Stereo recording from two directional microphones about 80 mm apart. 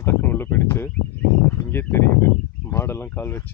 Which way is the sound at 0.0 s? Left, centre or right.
Left.